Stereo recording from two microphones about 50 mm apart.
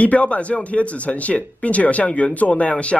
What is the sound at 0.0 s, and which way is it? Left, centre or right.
Speech, left.